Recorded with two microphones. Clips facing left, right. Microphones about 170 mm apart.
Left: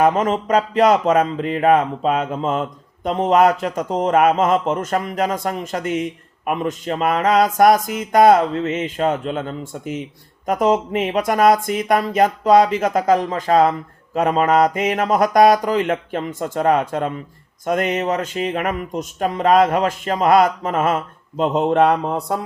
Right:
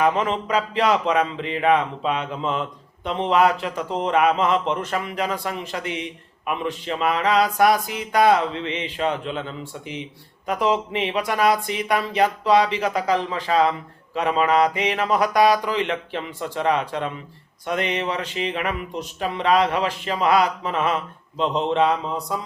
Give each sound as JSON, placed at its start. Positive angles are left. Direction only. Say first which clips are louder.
{"t": 0.0, "sound": "speech", "louder": "left 4 dB", "side_deg": 45}